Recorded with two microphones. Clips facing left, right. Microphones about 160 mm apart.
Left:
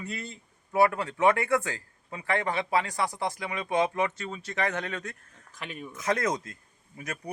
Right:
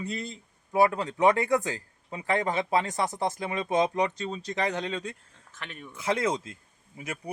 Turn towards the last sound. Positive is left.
turn(degrees=-10)  # may be behind; listen again after turning